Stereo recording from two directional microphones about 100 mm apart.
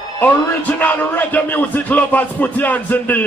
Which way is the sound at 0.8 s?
15° left (ahead or behind).